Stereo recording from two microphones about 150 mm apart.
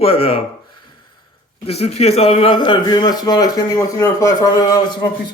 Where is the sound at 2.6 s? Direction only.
30° left (ahead or behind).